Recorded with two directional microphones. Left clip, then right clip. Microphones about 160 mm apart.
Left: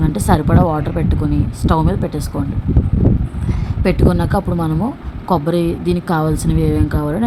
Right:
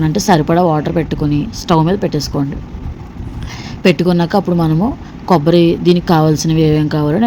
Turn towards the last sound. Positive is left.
turn(degrees=-15)  # may be behind; listen again after turning